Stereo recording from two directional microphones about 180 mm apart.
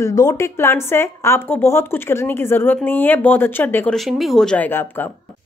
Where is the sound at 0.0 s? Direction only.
20° left (ahead or behind).